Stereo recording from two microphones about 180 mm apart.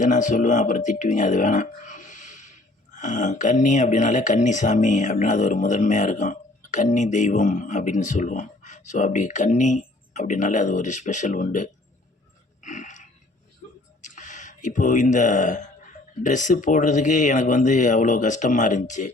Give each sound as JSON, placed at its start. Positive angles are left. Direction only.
{"t": 0.0, "sound": "speech", "side_deg": 45}
{"t": 12.6, "sound": "a sound", "side_deg": 45}
{"t": 16.2, "sound": "speech", "side_deg": 45}